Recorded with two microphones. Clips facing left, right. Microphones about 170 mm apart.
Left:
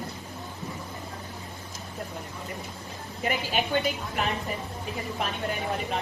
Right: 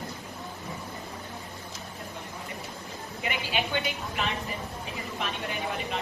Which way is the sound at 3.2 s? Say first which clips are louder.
Left 3 dB; 40° left (ahead or behind).